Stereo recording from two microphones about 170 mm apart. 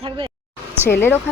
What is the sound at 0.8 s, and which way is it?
Speech, 15° left (ahead or behind).